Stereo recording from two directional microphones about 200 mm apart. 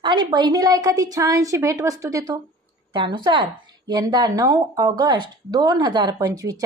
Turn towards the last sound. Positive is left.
turn(degrees=-15)  # may be behind; listen again after turning